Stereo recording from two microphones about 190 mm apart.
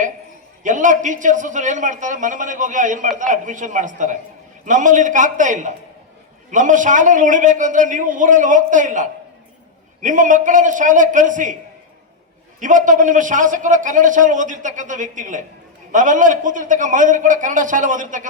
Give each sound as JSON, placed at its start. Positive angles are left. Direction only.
{"t": 0.6, "sound": "a man's voice", "side_deg": -40}
{"t": 12.5, "sound": "a man's voice", "side_deg": -40}